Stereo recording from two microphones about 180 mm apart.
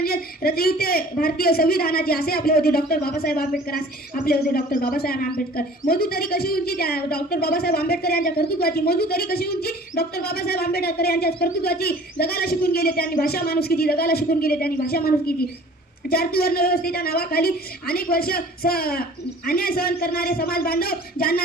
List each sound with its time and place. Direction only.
0.0 s a woman's voice: 55° left (ahead or behind)